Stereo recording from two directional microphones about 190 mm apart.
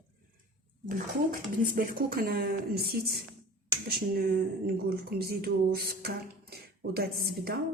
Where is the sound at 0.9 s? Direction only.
45° right (ahead or behind).